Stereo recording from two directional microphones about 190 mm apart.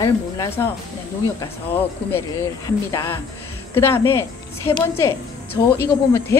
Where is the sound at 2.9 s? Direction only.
20° left (ahead or behind).